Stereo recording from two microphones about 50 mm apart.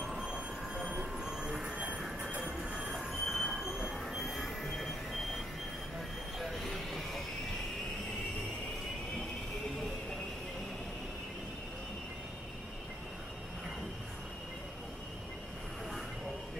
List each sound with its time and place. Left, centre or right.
0.0 s train: centre
6.3 s vehicle: centre